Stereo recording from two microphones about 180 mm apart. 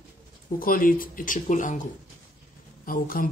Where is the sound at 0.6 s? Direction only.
50° left (ahead or behind).